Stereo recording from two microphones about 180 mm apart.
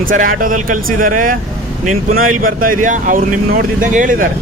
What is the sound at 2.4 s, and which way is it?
Speech, 50° right (ahead or behind).